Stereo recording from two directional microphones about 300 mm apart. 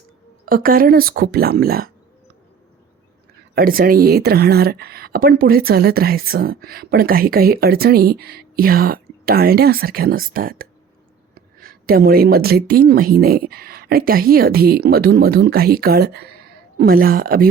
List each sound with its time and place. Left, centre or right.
0.4 s speech: right
3.5 s speech: right